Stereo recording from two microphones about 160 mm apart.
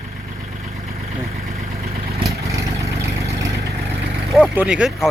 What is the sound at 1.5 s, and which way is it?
Vehicle, 40° right (ahead or behind).